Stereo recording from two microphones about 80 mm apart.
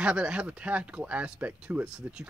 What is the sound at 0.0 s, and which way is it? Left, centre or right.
Speech, centre.